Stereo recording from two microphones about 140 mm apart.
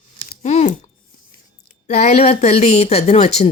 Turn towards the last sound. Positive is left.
turn(degrees=50)  # may be behind; listen again after turning